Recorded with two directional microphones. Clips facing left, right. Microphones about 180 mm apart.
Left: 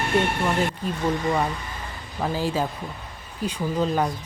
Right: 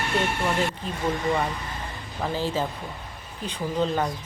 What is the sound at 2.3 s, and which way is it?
Speech, 10° left (ahead or behind).